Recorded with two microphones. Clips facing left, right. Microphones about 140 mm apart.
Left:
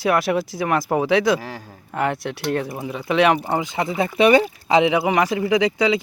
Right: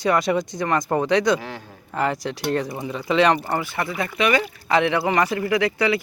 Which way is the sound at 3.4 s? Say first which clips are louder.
Left 2 dB; 15° left (ahead or behind).